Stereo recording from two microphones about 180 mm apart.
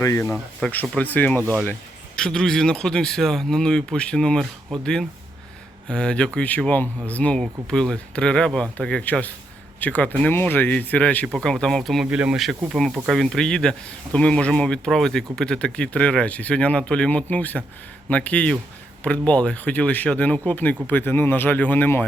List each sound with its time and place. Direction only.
0.0 s speech: 15° left (ahead or behind)
0.3 s speech: 5° left (ahead or behind)